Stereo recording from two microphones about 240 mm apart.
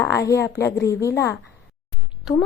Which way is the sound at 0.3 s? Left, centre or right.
Centre.